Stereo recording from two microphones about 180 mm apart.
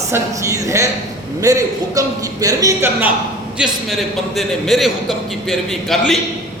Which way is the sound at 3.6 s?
Centre (ahead or behind).